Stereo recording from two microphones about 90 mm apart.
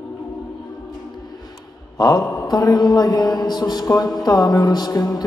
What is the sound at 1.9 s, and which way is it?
Mantra, 45° left (ahead or behind).